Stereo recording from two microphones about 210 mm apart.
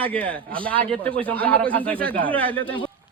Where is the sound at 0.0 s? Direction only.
5° left (ahead or behind).